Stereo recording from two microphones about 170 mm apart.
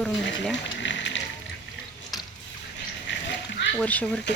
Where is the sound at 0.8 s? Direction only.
90° left.